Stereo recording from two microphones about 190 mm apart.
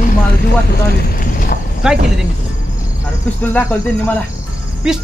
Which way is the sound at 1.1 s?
50° left (ahead or behind).